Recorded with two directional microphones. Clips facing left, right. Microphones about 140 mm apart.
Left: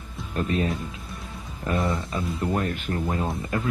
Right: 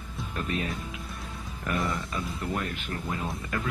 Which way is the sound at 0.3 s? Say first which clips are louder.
Left 7 dB; 35° left (ahead or behind).